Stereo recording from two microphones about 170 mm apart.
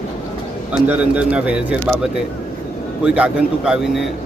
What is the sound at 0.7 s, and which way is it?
A man's voice, 10° right (ahead or behind).